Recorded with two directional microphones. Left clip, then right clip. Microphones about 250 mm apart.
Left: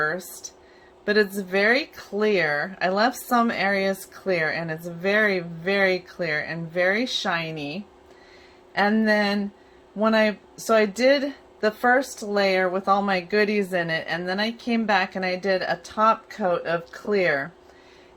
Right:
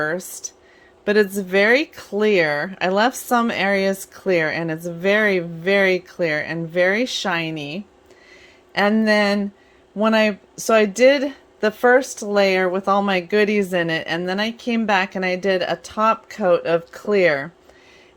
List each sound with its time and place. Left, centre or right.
0.0 s speech: right